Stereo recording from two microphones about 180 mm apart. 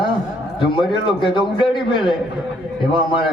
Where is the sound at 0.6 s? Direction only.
25° left (ahead or behind).